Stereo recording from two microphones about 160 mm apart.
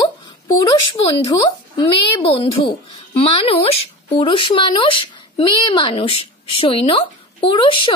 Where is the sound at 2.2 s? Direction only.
35° left (ahead or behind).